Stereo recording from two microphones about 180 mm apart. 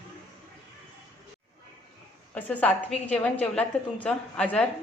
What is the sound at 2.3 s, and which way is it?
A woman's voice, 10° left (ahead or behind).